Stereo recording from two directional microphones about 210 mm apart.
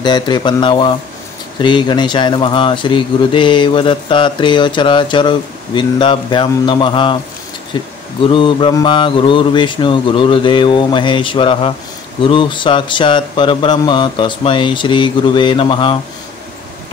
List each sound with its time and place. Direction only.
0.0 s speech: 20° left (ahead or behind)